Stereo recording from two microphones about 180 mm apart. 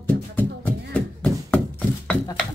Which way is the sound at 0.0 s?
10° left (ahead or behind).